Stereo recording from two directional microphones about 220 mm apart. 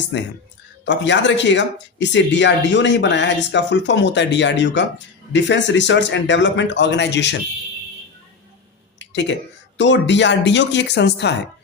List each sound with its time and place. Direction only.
0.1 s speech: 55° left (ahead or behind)
9.0 s a sound: 55° left (ahead or behind)
9.7 s speech: 55° left (ahead or behind)